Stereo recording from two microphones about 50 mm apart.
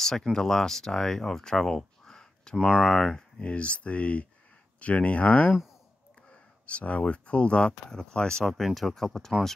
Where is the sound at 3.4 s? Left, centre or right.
Left.